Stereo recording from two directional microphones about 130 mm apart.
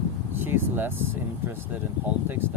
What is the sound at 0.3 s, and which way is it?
Speech, 15° right (ahead or behind).